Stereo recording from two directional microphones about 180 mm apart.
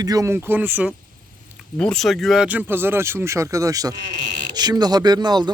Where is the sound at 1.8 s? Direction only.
5° left (ahead or behind).